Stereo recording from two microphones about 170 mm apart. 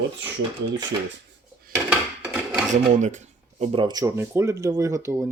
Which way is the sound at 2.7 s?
45° right (ahead or behind).